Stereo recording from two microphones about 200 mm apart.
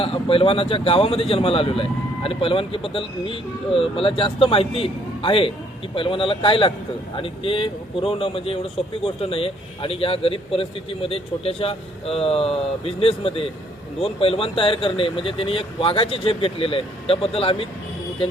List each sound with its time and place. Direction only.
0.0 s speech: 25° left (ahead or behind)